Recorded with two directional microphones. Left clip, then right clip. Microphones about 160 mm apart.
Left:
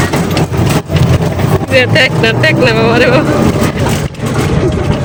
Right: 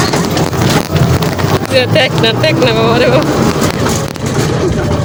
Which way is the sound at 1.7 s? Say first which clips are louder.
Left 2 dB; centre (ahead or behind).